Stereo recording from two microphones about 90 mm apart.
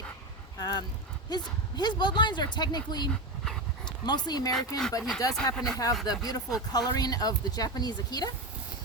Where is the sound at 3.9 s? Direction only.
50° left (ahead or behind).